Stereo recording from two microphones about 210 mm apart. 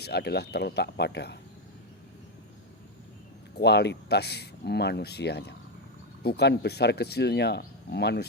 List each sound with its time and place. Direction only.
0.0 s speech: 50° left (ahead or behind)
3.5 s speech: 50° left (ahead or behind)